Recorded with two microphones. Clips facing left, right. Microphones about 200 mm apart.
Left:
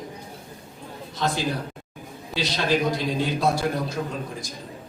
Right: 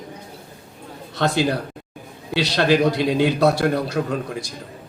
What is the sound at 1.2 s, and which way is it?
A man's voice, 70° right (ahead or behind).